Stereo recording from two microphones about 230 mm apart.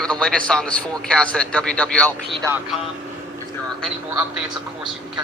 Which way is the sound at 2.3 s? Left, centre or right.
Centre.